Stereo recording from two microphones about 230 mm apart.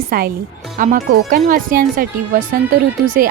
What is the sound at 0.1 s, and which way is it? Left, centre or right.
Speech, right.